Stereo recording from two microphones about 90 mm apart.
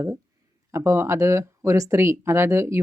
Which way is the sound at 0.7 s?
35° right (ahead or behind).